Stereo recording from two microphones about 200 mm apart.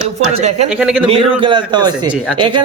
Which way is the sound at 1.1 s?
25° right (ahead or behind).